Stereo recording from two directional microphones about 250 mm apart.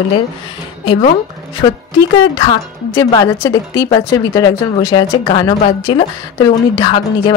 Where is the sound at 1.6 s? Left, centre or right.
Centre.